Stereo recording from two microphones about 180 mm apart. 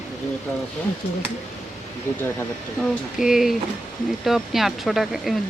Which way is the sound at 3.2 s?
Centre (ahead or behind).